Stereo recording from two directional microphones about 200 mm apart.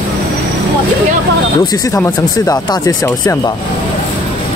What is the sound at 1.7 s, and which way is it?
Speech, 15° left (ahead or behind).